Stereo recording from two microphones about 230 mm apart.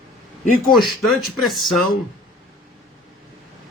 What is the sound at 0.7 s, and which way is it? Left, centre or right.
Speech, centre.